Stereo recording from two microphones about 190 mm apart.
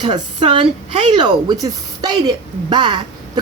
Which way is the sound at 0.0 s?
25° right (ahead or behind).